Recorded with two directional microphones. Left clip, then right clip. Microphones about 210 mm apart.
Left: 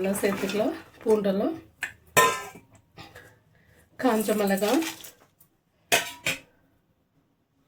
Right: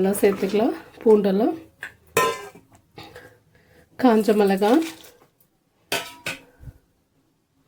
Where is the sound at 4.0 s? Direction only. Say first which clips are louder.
Right 7 dB; 40° right (ahead or behind).